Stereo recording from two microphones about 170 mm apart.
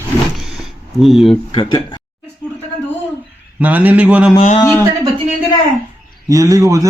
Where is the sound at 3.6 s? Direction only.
10° right (ahead or behind).